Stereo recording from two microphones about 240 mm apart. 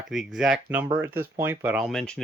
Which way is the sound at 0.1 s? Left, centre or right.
Centre.